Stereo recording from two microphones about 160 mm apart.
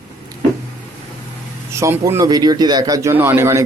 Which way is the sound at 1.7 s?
20° right (ahead or behind).